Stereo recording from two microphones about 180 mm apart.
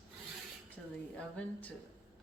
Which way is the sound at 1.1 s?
5° left (ahead or behind).